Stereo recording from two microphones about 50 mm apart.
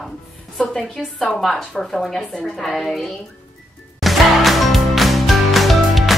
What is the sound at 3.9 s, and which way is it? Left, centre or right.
Music, centre.